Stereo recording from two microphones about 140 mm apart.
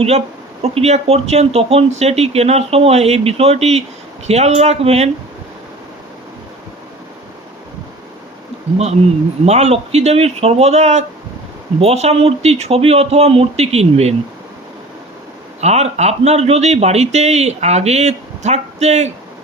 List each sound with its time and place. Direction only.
0.6 s speech: 45° right (ahead or behind)
9.5 s speech: 50° right (ahead or behind)
15.6 s speech: 50° right (ahead or behind)